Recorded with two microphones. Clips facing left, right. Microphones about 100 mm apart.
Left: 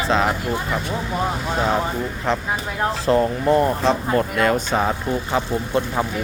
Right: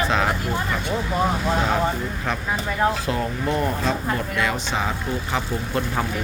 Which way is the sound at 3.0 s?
35° left (ahead or behind).